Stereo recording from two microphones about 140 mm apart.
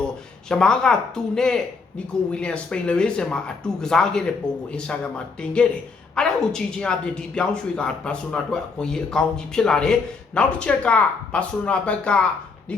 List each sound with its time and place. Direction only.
0.4 s speech: 5° left (ahead or behind)